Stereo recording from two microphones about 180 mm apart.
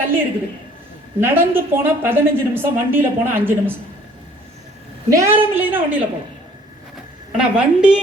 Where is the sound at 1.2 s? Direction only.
10° right (ahead or behind).